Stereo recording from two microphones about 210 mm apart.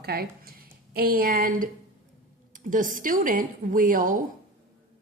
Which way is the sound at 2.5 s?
40° right (ahead or behind).